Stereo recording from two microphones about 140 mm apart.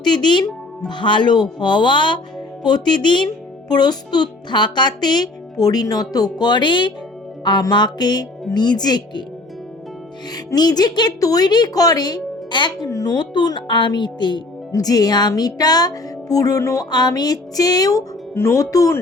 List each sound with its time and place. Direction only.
0.0 s speech: 30° left (ahead or behind)
10.3 s speech: 30° left (ahead or behind)